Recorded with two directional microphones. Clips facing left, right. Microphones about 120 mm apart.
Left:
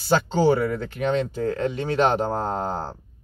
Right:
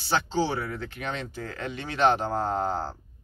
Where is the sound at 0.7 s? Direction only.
40° left (ahead or behind).